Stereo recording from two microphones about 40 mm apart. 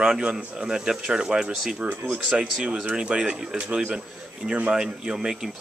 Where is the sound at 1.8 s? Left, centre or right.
Right.